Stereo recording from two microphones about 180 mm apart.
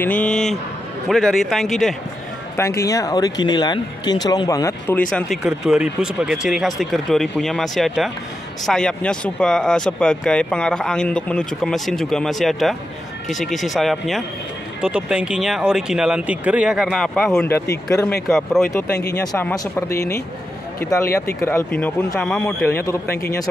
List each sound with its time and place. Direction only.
0.0 s a man's voice: 5° left (ahead or behind)
2.5 s speech: 15° left (ahead or behind)
5.1 s speech: centre (ahead or behind)
17.4 s speech: 15° left (ahead or behind)
22.8 s speech: 15° left (ahead or behind)